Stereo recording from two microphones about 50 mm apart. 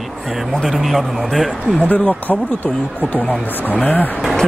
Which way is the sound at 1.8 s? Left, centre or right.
Left.